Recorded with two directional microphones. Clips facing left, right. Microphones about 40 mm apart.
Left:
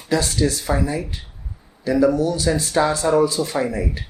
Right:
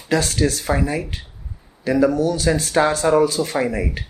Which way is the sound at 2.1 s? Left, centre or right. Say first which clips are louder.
Right 1 dB; right.